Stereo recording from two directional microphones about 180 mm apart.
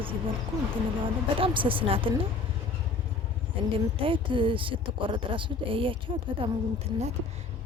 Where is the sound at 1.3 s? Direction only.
30° right (ahead or behind).